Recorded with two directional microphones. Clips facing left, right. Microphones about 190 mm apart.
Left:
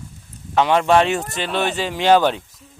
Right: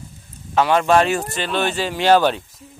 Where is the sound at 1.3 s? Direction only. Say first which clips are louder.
Even; 20° left (ahead or behind).